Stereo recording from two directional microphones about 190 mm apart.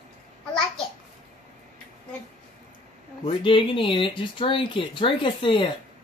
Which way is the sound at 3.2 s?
25° left (ahead or behind).